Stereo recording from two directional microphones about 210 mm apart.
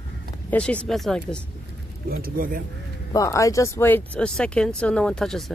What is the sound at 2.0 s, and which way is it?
Speech, 45° right (ahead or behind).